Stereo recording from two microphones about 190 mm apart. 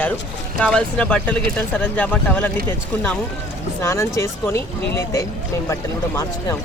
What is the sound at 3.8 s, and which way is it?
Speech, 15° left (ahead or behind).